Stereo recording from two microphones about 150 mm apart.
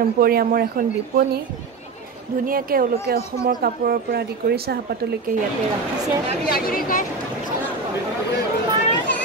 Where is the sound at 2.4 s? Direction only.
70° right (ahead or behind); by 4.7 s 90° right.